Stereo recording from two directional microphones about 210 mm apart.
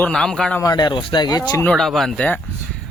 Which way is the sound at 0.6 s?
20° left (ahead or behind).